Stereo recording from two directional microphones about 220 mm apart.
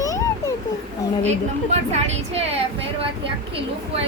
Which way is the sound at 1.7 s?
30° right (ahead or behind).